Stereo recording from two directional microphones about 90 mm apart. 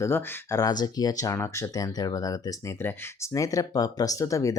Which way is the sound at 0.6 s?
45° left (ahead or behind).